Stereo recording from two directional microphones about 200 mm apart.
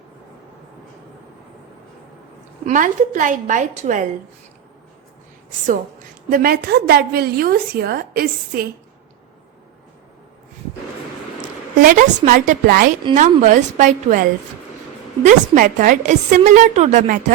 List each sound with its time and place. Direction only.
2.6 s a woman's voice: 40° right (ahead or behind)
6.3 s a woman's voice: 50° right (ahead or behind)
11.8 s a woman's voice: 40° right (ahead or behind)